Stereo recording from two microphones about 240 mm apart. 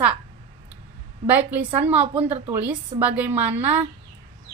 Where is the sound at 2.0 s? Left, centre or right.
Right.